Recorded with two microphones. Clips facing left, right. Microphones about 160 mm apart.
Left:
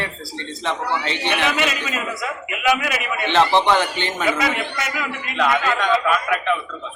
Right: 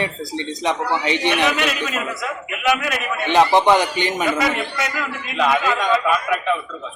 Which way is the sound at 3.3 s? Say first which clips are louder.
Right 2 dB; 15° right (ahead or behind).